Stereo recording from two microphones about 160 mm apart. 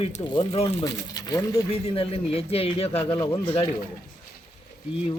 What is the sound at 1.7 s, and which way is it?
Speech, 35° left (ahead or behind).